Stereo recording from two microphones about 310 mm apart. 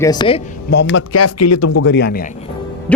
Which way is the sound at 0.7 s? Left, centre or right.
Left.